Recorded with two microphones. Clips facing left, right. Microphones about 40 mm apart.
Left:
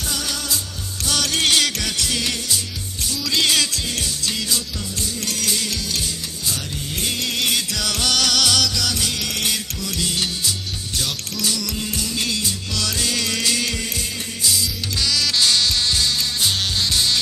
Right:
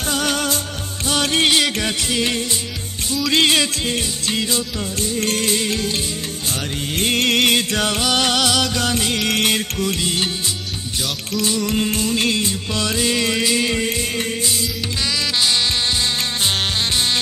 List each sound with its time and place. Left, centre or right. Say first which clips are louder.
0.1 s music: right 7 dB; right
1.0 s music: right 3 dB; right
6.9 s music: right 7 dB; right
8.1 s music: right 1 dB; right
8.6 s music: right 3 dB; right
15.1 s music: even; centre